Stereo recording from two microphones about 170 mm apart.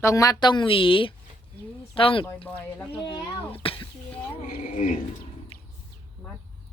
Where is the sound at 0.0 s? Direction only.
20° left (ahead or behind).